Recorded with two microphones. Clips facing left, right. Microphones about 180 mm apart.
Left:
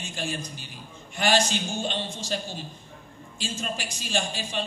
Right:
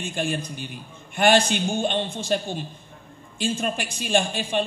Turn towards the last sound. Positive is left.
turn(degrees=-55)  # may be behind; listen again after turning